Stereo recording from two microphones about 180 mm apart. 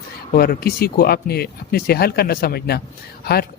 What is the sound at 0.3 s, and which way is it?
Speech, 60° left (ahead or behind).